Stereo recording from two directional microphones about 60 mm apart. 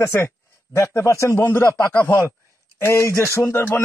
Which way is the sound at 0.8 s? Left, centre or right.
Left.